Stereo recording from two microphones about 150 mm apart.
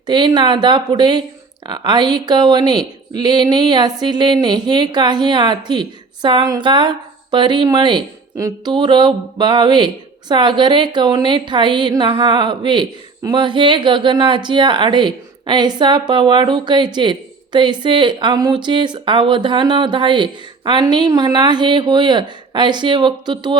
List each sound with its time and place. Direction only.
0.0 s a woman's voice: 30° right (ahead or behind)